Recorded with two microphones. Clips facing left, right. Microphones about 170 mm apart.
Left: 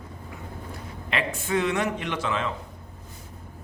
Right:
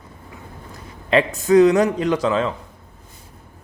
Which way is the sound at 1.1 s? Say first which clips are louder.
Right 12 dB; 40° right (ahead or behind).